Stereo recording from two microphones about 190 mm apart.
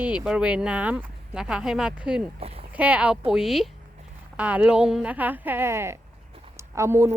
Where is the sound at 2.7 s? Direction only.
10° right (ahead or behind).